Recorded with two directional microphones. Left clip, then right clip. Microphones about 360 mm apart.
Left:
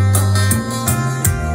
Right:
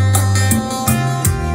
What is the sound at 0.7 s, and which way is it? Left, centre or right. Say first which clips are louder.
Music: right 2 dB; centre.